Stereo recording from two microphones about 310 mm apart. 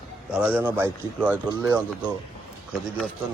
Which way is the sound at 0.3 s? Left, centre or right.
Centre.